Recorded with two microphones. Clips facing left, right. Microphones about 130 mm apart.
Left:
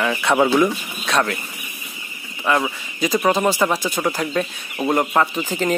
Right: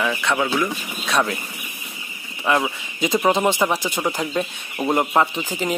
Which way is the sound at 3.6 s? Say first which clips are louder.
Left 1 dB; 15° right (ahead or behind).